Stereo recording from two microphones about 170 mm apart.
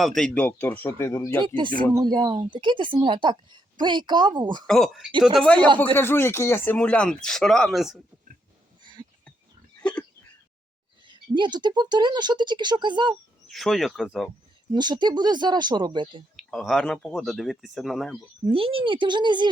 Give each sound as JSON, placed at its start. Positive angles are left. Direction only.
{"t": 0.0, "sound": "speech", "side_deg": 5}
{"t": 1.4, "sound": "speech", "side_deg": -30}
{"t": 4.6, "sound": "speech", "side_deg": 0}
{"t": 8.8, "sound": "a sound", "side_deg": -25}
{"t": 9.8, "sound": "a sound", "side_deg": 10}
{"t": 11.0, "sound": "speech", "side_deg": -25}
{"t": 13.5, "sound": "speech", "side_deg": 0}
{"t": 14.7, "sound": "speech", "side_deg": -25}
{"t": 16.4, "sound": "speech", "side_deg": 0}
{"t": 18.5, "sound": "speech", "side_deg": -30}